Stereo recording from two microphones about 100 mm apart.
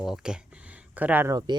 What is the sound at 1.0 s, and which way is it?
Speech, 15° right (ahead or behind).